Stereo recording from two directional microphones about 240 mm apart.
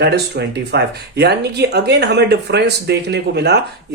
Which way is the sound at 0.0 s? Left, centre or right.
Right.